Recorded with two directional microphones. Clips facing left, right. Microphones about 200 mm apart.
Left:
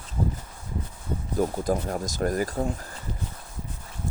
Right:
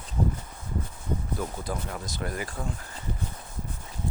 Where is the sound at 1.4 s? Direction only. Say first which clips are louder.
Left 8 dB; 40° left (ahead or behind).